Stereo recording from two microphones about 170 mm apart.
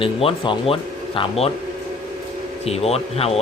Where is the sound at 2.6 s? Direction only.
35° left (ahead or behind).